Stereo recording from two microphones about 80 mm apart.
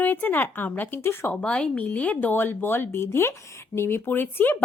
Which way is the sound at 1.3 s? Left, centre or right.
Centre.